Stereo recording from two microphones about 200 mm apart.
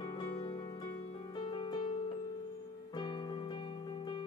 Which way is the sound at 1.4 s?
25° left (ahead or behind).